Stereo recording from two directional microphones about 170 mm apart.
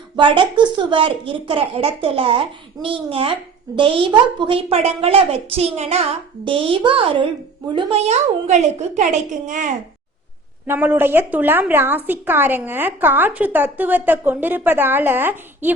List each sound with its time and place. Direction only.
0.2 s a woman's voice: 30° right (ahead or behind); by 9.7 s 50° right (ahead or behind)
10.7 s a woman's voice: 10° right (ahead or behind)